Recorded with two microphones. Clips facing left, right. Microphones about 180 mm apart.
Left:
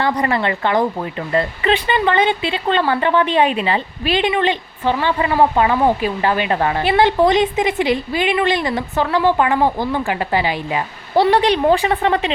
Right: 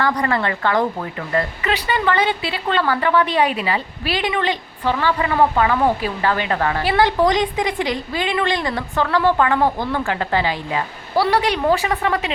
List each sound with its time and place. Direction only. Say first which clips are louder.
0.0 s speech: left 2 dB; 20° left (ahead or behind)